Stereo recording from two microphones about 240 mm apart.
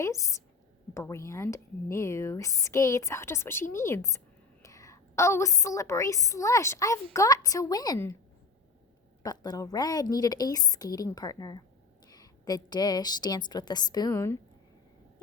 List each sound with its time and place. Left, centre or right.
0.0 s a woman's voice: centre
9.2 s a woman's voice: centre